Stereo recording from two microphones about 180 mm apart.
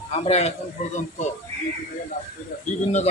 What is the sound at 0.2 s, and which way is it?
Speech, 35° left (ahead or behind).